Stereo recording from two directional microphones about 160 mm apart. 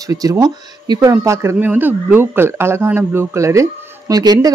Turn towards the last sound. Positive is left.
turn(degrees=-25)  # may be behind; listen again after turning